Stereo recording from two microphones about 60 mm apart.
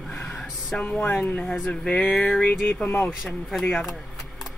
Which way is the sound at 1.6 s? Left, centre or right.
Centre.